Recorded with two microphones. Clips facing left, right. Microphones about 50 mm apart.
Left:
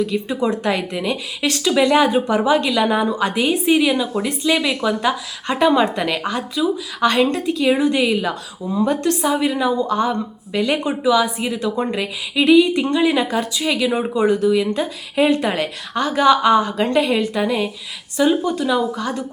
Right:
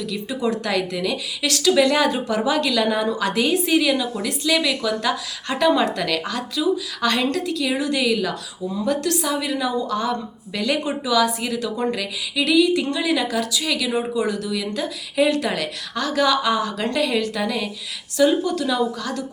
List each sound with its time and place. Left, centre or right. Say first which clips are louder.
0.0 s speech: left 4 dB; left